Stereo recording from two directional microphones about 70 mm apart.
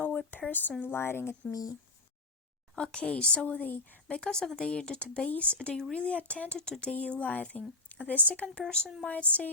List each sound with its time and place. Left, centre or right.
0.0 s a sound: left
0.9 s speech: left
2.7 s a woman's voice: centre
4.2 s a woman's voice: centre